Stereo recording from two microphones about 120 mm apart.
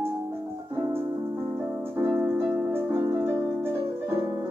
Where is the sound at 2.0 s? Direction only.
20° right (ahead or behind).